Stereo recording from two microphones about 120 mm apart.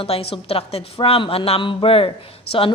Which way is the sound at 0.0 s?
50° left (ahead or behind).